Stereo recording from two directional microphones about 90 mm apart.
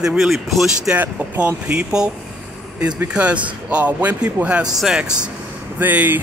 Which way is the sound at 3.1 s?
15° right (ahead or behind).